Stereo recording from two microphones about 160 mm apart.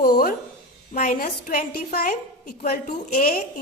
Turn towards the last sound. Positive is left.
turn(degrees=55)  # may be behind; listen again after turning